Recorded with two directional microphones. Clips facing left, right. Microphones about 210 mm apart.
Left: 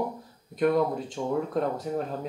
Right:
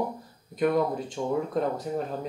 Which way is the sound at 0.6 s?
Centre (ahead or behind).